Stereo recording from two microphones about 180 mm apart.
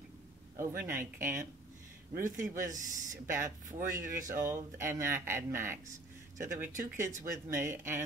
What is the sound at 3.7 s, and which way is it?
Speech, 50° right (ahead or behind).